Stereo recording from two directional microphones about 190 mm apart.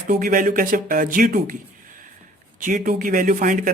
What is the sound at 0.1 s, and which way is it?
A man's voice, 45° right (ahead or behind).